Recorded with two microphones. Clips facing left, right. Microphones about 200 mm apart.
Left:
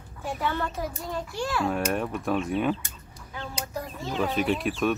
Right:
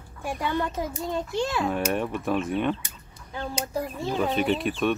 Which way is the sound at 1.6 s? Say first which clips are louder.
Right 1 dB; 5° right (ahead or behind).